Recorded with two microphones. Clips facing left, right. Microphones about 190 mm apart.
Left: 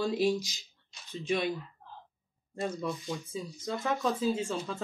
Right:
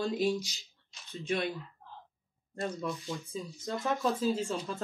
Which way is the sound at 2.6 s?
15° left (ahead or behind).